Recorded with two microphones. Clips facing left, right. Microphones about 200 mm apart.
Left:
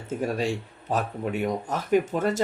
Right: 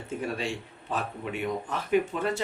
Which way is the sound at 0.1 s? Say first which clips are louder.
Left 5 dB; 40° left (ahead or behind).